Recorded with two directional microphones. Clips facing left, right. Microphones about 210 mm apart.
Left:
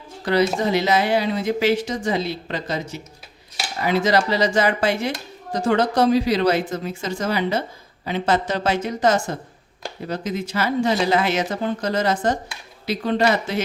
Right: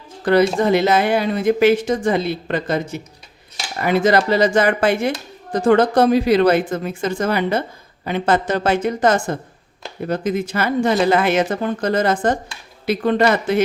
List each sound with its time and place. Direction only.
0.3 s speech: 55° right (ahead or behind)